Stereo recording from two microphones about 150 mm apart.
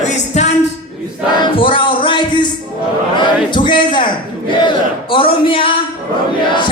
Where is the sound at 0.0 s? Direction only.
50° left (ahead or behind).